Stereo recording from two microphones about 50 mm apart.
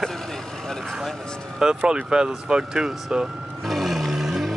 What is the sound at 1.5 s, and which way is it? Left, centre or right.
Speech, centre.